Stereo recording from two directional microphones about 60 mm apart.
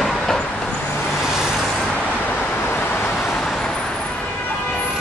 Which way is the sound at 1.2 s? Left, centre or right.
Centre.